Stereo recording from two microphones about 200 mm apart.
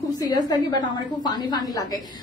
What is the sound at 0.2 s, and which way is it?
A woman's voice, 20° left (ahead or behind).